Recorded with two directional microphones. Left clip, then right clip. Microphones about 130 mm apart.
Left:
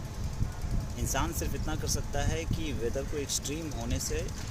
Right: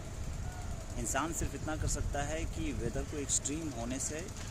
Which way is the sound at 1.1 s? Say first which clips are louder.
Left 2 dB; 10° right (ahead or behind).